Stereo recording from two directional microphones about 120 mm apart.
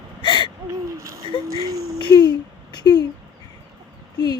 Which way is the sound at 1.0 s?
25° right (ahead or behind).